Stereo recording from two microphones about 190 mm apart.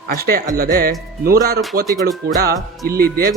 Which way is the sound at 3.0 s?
50° right (ahead or behind).